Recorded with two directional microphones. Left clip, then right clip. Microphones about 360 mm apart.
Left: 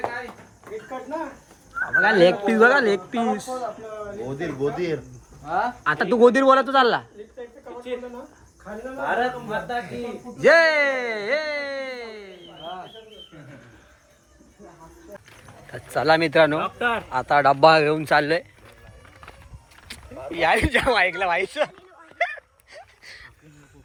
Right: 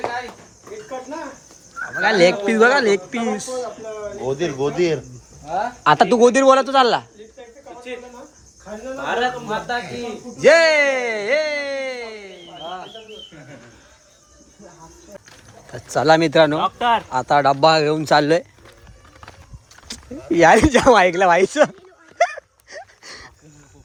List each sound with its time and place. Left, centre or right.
1.8 s speech: centre
4.4 s speech: right
5.8 s speech: centre
9.0 s speech: centre
15.7 s speech: centre
20.3 s speech: centre
22.2 s a sound: centre